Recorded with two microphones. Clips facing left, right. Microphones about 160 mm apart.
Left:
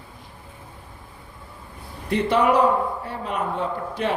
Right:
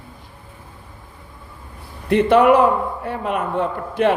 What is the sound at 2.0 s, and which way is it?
A man's voice, 60° right (ahead or behind).